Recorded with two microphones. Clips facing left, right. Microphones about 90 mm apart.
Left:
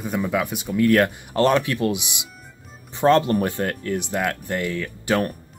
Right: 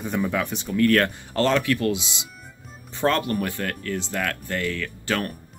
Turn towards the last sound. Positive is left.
turn(degrees=20)  # may be behind; listen again after turning